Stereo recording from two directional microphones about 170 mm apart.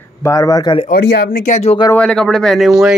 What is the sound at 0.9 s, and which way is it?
Speech, 70° left (ahead or behind).